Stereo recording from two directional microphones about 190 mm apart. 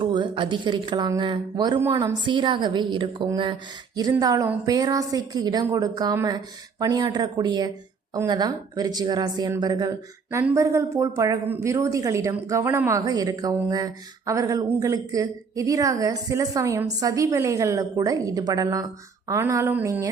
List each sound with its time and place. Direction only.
0.0 s a woman's voice: 25° right (ahead or behind)